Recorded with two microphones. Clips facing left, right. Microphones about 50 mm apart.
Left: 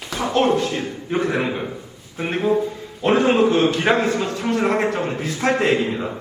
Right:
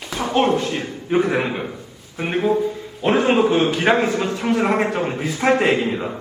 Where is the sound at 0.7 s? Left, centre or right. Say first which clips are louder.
Right 2 dB; centre.